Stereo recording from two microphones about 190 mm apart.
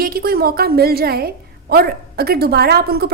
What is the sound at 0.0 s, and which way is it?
A woman's voice, 50° right (ahead or behind).